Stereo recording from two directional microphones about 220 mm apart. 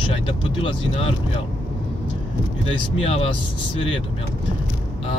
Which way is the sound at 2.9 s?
25° left (ahead or behind).